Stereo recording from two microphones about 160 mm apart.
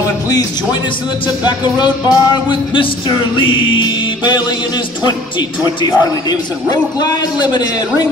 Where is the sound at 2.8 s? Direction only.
30° left (ahead or behind).